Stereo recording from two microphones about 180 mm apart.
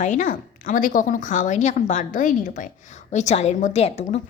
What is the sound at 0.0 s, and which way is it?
A woman's voice, 45° left (ahead or behind).